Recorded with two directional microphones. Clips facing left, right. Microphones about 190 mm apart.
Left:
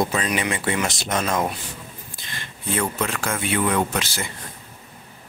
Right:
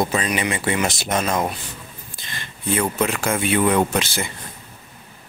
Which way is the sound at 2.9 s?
10° right (ahead or behind).